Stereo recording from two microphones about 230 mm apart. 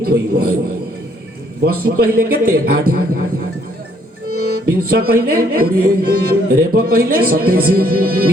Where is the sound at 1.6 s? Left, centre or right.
Right.